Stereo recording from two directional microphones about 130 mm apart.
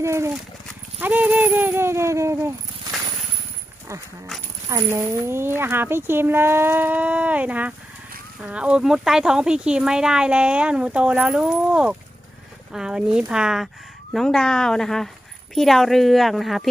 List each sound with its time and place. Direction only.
0.0 s speech: 20° right (ahead or behind)
0.9 s dog: 15° right (ahead or behind)
4.7 s a woman's voice: 20° right (ahead or behind); by 16.6 s centre (ahead or behind)